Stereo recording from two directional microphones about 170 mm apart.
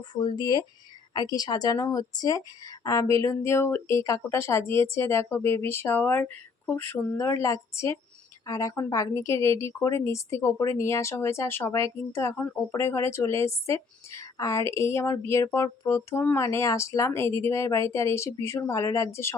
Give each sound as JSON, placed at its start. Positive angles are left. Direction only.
{"t": 0.1, "sound": "a woman's voice", "side_deg": 25}